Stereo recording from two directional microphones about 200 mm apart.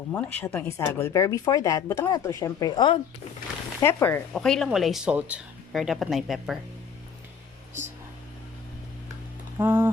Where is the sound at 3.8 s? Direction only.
10° left (ahead or behind).